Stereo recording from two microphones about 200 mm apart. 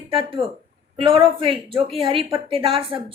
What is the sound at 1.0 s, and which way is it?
A woman's voice, 25° right (ahead or behind).